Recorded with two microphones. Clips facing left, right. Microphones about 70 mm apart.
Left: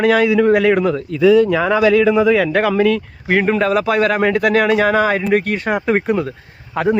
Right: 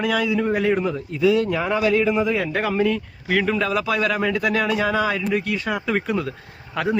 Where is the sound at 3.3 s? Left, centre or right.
Left.